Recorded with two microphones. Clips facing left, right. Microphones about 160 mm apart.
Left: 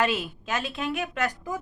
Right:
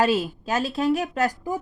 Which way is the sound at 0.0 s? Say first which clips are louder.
Right 5 dB; 40° right (ahead or behind).